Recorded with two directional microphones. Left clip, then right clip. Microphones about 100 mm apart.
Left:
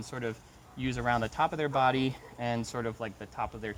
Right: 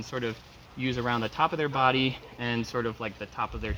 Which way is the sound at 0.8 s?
60° left (ahead or behind).